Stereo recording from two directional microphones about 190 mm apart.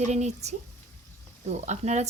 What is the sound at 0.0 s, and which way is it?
Speech, 35° right (ahead or behind).